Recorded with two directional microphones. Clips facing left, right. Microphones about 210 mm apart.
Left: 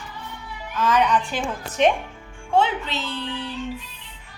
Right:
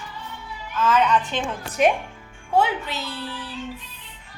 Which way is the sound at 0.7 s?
15° left (ahead or behind).